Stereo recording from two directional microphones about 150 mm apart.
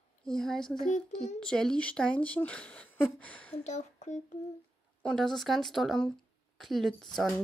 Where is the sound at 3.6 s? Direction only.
50° left (ahead or behind).